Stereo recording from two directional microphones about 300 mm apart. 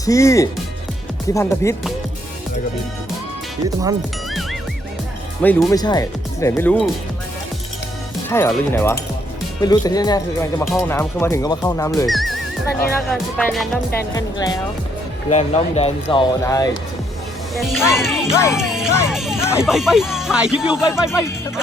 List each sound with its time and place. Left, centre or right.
0.0 s speech: centre
5.4 s speech: centre
8.3 s speech: centre
12.0 s speech: centre
14.2 s speech: centre
17.5 s speech: centre
18.5 s music: centre
19.4 s speech: centre